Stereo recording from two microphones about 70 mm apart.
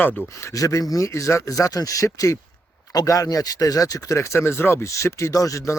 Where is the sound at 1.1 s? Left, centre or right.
Left.